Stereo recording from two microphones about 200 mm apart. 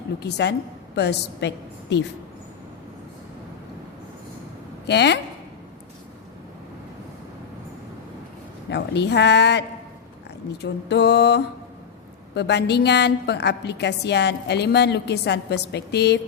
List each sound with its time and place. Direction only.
0.2 s a woman's voice: 55° left (ahead or behind)
4.9 s a woman's voice: 60° left (ahead or behind)
8.7 s a woman's voice: 60° left (ahead or behind)